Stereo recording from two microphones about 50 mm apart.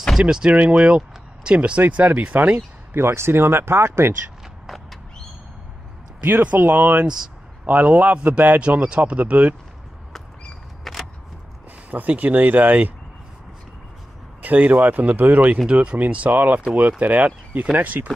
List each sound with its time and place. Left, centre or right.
0.2 s speech: centre
0.5 s speech: right
1.8 s speech: right
2.5 s speech: right
6.8 s speech: right
8.5 s speech: right
10.8 s single-lens reflex camera: centre
11.9 s speech: right
14.4 s speech: right